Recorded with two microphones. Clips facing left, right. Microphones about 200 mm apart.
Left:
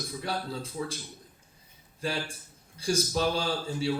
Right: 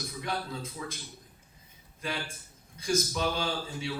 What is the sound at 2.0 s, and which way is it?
A man's voice, 30° left (ahead or behind).